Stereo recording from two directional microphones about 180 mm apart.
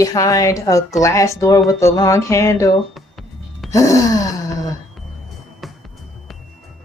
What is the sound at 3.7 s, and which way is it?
Speech, 15° left (ahead or behind).